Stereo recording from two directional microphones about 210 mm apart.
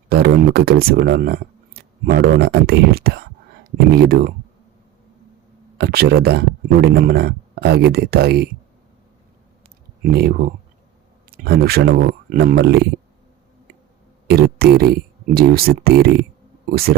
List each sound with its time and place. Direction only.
0.1 s speech: 50° right (ahead or behind)
5.7 s speech: 50° right (ahead or behind)
10.0 s speech: 50° right (ahead or behind)
14.3 s speech: 50° right (ahead or behind)